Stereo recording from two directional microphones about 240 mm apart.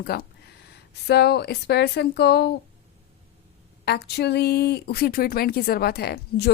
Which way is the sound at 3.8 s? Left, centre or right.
Left.